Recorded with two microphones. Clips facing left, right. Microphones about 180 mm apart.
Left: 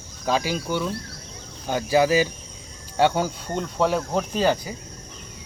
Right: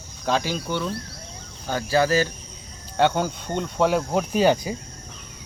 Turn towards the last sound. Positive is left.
turn(degrees=-15)  # may be behind; listen again after turning